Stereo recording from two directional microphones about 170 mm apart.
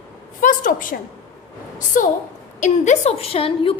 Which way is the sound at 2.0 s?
50° left (ahead or behind).